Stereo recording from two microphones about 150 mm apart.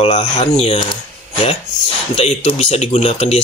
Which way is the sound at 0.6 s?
45° left (ahead or behind).